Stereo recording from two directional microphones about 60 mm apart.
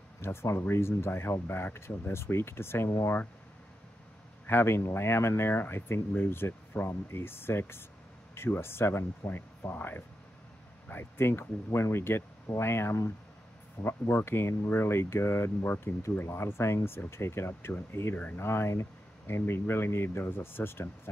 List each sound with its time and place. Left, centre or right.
0.2 s speech: left
4.5 s speech: left
18.1 s speech: left
18.4 s speech: left